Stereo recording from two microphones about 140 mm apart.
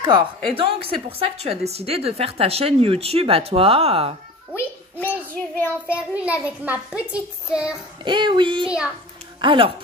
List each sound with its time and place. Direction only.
0.6 s a woman's voice: 40° right (ahead or behind)
4.9 s a child's voice: 15° left (ahead or behind)
5.9 s a child's voice: 10° right (ahead or behind)
8.0 s child singing: 35° right (ahead or behind)
8.6 s a child's voice: 5° right (ahead or behind)
9.4 s child singing: 35° right (ahead or behind)